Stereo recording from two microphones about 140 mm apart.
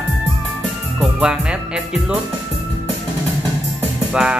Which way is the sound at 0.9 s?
5° right (ahead or behind).